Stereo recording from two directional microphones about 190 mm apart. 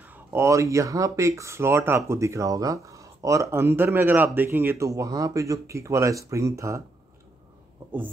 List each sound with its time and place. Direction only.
0.0 s speech: 10° right (ahead or behind)